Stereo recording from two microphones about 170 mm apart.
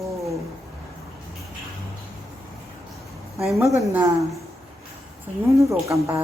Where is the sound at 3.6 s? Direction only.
15° right (ahead or behind).